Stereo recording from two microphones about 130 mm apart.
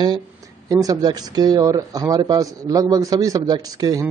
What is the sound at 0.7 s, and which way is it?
A man's voice, 30° right (ahead or behind).